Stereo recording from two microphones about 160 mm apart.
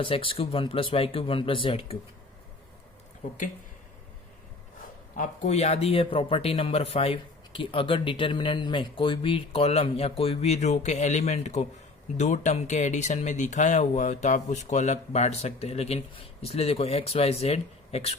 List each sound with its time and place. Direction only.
0.0 s speech: 35° left (ahead or behind)
5.1 s speech: 55° left (ahead or behind)